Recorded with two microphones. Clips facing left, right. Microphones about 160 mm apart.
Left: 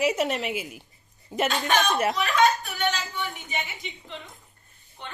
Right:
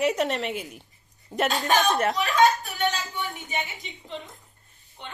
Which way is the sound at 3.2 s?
40° right (ahead or behind).